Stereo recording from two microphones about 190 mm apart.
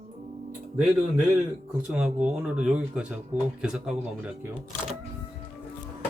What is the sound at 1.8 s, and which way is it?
Speech, 5° right (ahead or behind).